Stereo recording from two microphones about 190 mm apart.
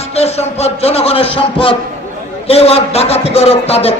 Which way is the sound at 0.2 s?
35° left (ahead or behind).